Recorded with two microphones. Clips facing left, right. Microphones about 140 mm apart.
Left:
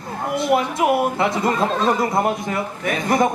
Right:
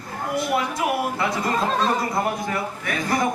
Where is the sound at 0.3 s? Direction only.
25° left (ahead or behind).